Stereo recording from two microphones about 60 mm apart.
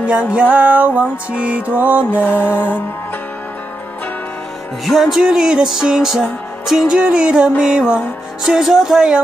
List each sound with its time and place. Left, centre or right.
0.0 s music: centre
2.2 s music: left
4.8 s music: centre